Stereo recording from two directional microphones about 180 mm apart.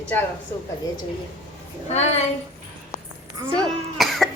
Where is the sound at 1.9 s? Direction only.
40° left (ahead or behind).